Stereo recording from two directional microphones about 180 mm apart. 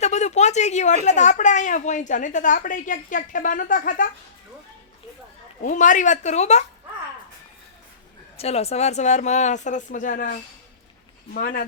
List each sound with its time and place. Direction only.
0.0 s a woman's voice: 40° left (ahead or behind)
5.6 s a woman's voice: 45° left (ahead or behind)
8.4 s speech: 35° left (ahead or behind)
11.3 s a woman's voice: 50° left (ahead or behind)